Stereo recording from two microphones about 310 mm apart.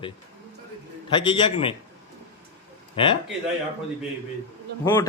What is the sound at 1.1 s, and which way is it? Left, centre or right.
Speech, centre.